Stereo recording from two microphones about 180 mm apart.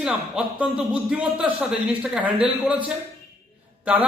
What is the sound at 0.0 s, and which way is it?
A man's voice, 5° right (ahead or behind).